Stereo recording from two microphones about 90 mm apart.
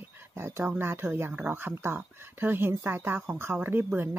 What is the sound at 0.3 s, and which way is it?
Speech, 30° right (ahead or behind).